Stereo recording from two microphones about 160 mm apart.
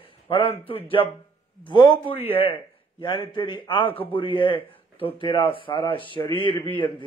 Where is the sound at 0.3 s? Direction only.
35° left (ahead or behind).